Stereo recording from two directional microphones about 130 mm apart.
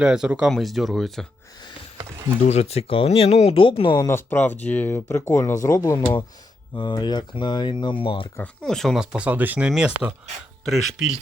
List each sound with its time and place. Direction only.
0.0 s speech: 5° right (ahead or behind)
2.5 s speech: 55° left (ahead or behind)
3.9 s speech: 20° left (ahead or behind); by 8.3 s 40° left (ahead or behind)
8.4 s speech: 5° left (ahead or behind)
9.1 s speech: 10° right (ahead or behind)